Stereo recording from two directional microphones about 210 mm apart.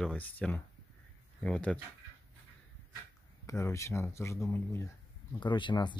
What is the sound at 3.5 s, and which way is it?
Speech, 15° left (ahead or behind).